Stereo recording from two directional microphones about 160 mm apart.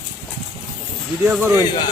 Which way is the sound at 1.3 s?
10° right (ahead or behind).